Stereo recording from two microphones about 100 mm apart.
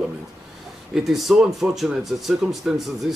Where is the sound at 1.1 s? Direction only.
Centre (ahead or behind).